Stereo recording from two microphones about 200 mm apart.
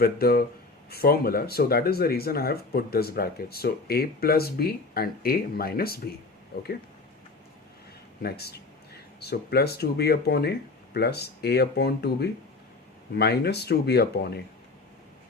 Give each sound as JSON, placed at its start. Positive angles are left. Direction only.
{"t": 0.0, "sound": "speech", "side_deg": 50}
{"t": 8.2, "sound": "speech", "side_deg": 50}